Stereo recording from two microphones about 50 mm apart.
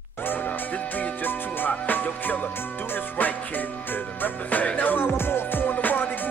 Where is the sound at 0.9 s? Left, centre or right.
Left.